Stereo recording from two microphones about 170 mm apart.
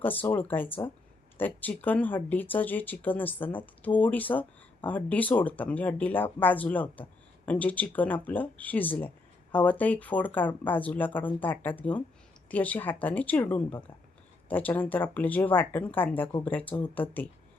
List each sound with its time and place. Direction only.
0.0 s speech: 10° left (ahead or behind)